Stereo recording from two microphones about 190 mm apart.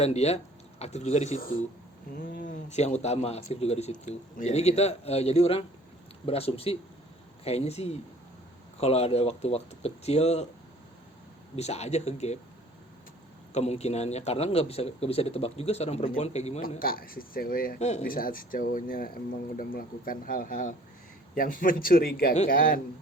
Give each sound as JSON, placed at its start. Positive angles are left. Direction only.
{"t": 0.0, "sound": "a man's voice", "side_deg": 35}
{"t": 11.5, "sound": "a man's voice", "side_deg": 35}
{"t": 13.5, "sound": "a man's voice", "side_deg": 35}
{"t": 16.6, "sound": "speech", "side_deg": 50}
{"t": 17.7, "sound": "speech", "side_deg": 35}